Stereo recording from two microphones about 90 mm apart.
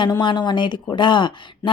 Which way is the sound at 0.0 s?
60° left (ahead or behind).